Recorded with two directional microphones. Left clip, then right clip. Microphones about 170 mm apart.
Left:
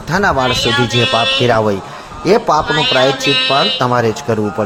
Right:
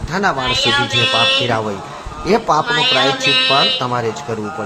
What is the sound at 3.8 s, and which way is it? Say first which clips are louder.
Speech: left 6 dB; 35° left (ahead or behind).